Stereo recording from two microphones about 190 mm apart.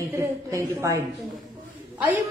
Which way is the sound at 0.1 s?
15° right (ahead or behind).